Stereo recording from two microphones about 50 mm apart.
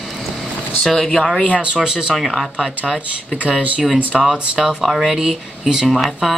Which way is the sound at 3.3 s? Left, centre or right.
Centre.